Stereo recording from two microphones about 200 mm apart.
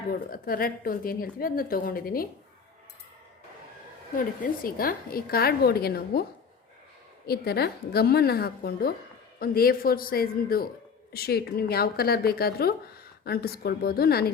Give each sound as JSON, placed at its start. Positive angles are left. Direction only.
{"t": 0.1, "sound": "a woman's voice", "side_deg": 45}
{"t": 4.6, "sound": "a woman's voice", "side_deg": 45}
{"t": 7.3, "sound": "a woman's voice", "side_deg": 55}